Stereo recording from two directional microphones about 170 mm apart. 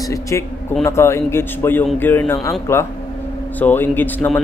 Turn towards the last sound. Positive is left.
turn(degrees=10)  # may be behind; listen again after turning